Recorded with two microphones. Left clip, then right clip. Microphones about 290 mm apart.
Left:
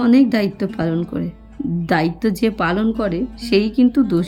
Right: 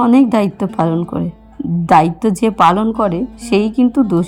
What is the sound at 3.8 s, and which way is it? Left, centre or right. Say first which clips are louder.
Speech: right 2 dB; right.